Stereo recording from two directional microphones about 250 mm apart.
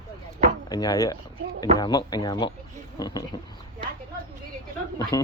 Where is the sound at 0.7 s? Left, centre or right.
Centre.